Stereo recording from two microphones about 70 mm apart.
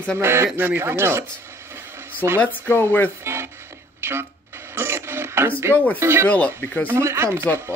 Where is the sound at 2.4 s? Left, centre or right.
Left.